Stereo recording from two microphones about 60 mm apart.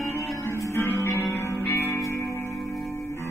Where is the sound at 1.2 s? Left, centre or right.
Left.